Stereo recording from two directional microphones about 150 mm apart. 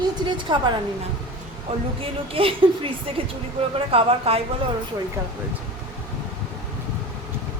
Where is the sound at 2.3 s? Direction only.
35° right (ahead or behind).